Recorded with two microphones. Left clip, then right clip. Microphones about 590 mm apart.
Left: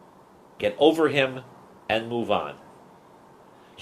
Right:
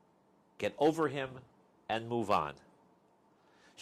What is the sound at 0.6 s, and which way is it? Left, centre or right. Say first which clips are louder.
Speech: left 11 dB; right.